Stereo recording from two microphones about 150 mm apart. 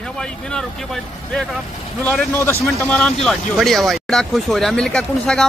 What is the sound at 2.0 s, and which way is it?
Speech, 10° left (ahead or behind).